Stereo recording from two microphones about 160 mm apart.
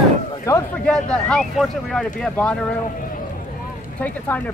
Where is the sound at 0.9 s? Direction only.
5° left (ahead or behind).